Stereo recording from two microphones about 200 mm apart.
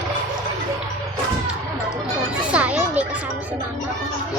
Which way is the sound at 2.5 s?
5° right (ahead or behind).